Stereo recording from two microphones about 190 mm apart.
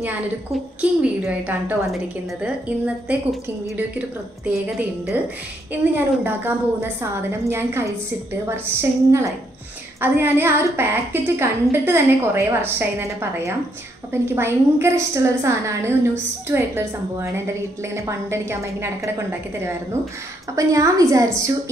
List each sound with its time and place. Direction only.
0.0 s a woman's voice: 10° right (ahead or behind)
4.5 s a woman's voice: 10° right (ahead or behind)